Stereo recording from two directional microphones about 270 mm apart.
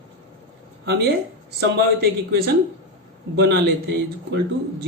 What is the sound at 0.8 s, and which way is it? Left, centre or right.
Speech, right.